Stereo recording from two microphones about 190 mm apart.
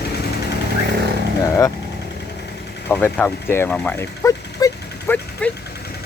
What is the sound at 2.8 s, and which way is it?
Speech, 10° left (ahead or behind).